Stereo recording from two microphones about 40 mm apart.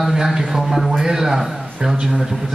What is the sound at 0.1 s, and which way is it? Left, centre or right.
A man's voice, centre.